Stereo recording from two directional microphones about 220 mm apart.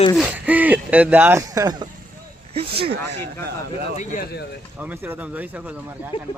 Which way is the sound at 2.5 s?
25° right (ahead or behind).